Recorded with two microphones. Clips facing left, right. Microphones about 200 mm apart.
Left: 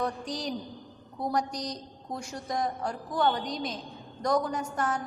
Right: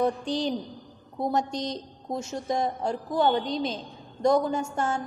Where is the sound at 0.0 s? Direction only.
25° right (ahead or behind).